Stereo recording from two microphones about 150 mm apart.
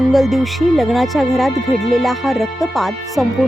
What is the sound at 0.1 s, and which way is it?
Speech, centre (ahead or behind).